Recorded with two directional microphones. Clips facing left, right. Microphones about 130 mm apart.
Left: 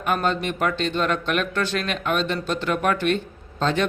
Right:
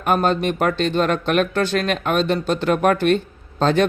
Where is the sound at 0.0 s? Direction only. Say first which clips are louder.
Right 5 dB; 45° right (ahead or behind).